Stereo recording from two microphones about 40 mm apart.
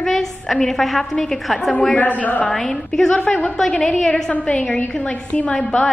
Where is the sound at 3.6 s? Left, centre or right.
Centre.